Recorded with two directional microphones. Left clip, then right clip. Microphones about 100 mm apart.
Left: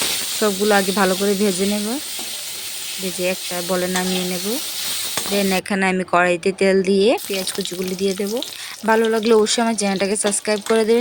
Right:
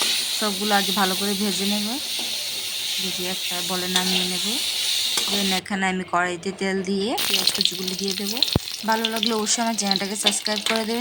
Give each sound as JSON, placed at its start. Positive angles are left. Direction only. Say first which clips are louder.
{"t": 0.3, "sound": "speech", "louder": "left 9 dB", "side_deg": 40}
{"t": 3.2, "sound": "speech", "louder": "left 4 dB", "side_deg": 40}
{"t": 5.5, "sound": "speech", "louder": "left 4 dB", "side_deg": 45}
{"t": 8.9, "sound": "speech", "louder": "left 7 dB", "side_deg": 50}